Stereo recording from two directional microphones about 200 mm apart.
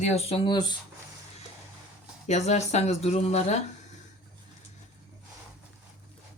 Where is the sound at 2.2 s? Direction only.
35° left (ahead or behind).